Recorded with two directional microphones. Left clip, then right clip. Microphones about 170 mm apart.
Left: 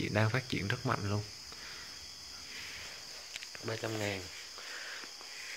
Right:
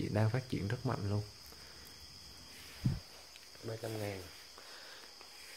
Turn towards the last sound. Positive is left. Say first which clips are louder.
# left 5 dB
turn(degrees=30)  # may be behind; listen again after turning